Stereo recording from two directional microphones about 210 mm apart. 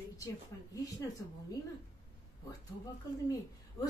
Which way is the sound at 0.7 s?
15° left (ahead or behind).